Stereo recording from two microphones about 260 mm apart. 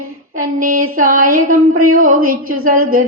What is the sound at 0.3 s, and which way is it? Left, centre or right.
Female singing, right.